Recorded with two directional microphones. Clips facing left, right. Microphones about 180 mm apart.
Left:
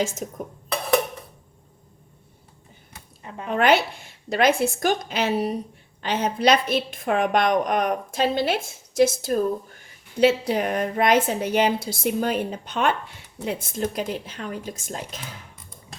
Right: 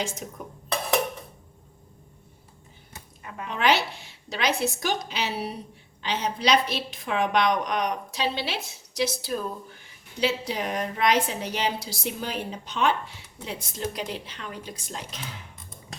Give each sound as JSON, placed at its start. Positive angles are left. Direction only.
{"t": 0.2, "sound": "a woman's voice", "side_deg": 40}
{"t": 3.2, "sound": "a sound", "side_deg": 30}
{"t": 3.5, "sound": "a woman's voice", "side_deg": 55}